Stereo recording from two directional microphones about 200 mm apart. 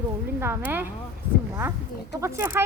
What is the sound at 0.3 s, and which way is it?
Speech, 10° right (ahead or behind).